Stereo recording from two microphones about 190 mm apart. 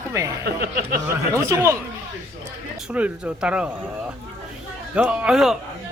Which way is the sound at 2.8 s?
5° right (ahead or behind).